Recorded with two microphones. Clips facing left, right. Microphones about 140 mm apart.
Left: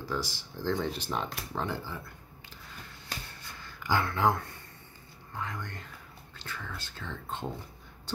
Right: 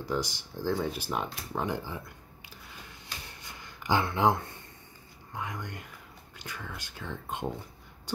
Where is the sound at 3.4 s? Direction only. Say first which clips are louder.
Even; 15° right (ahead or behind).